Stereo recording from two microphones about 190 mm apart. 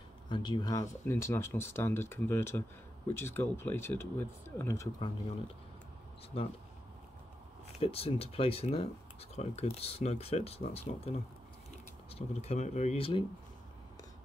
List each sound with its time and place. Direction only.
0.3 s speech: 25° left (ahead or behind)
7.8 s speech: 30° left (ahead or behind)